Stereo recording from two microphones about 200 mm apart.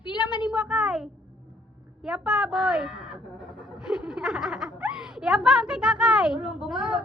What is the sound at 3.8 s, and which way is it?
Giggle, 5° right (ahead or behind).